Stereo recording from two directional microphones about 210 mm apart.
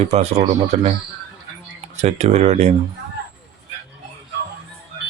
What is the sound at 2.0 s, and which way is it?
Speech, 30° right (ahead or behind).